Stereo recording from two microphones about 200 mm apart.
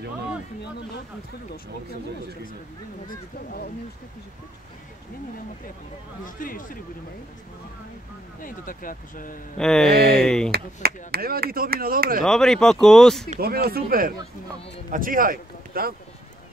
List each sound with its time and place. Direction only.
6.2 s speech: 40° left (ahead or behind)
8.4 s speech: 45° left (ahead or behind)
9.6 s speech: centre (ahead or behind)
10.5 s speech: 50° right (ahead or behind)
12.3 s speech: 5° left (ahead or behind)
13.4 s speech: 50° right (ahead or behind)